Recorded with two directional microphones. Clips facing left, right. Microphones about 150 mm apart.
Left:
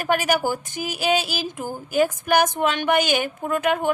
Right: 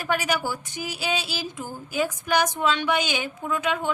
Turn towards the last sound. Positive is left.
turn(degrees=55)  # may be behind; listen again after turning